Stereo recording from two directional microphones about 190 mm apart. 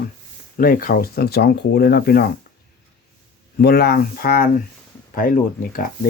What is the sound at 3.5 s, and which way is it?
Speech, 55° left (ahead or behind).